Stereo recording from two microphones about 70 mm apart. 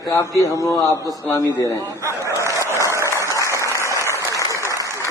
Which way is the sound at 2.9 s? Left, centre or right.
Right.